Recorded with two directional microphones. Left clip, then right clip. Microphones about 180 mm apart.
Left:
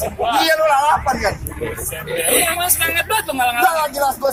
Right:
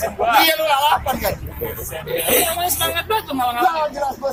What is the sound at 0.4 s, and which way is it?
Speech, 45° right (ahead or behind).